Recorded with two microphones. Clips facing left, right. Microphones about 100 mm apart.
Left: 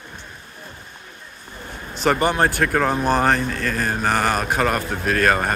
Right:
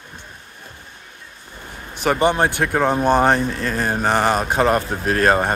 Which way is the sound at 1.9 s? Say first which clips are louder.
Even; 10° right (ahead or behind).